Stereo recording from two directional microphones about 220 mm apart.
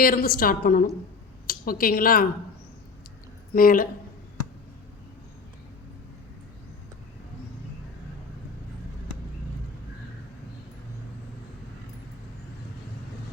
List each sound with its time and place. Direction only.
0.0 s a woman's voice: 40° left (ahead or behind)
3.5 s a woman's voice: 40° left (ahead or behind)